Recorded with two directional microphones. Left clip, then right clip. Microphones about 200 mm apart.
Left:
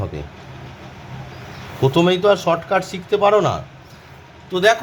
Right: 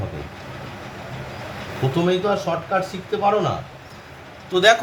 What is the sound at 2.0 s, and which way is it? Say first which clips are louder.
Speech: left 5 dB; 35° left (ahead or behind).